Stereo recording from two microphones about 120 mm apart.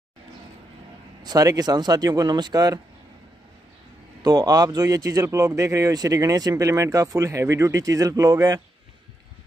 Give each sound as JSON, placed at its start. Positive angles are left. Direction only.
{"t": 1.2, "sound": "speech", "side_deg": -30}
{"t": 4.2, "sound": "speech", "side_deg": -30}